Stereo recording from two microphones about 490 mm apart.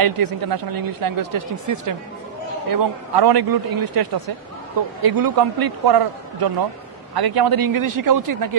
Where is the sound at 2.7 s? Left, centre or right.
Right.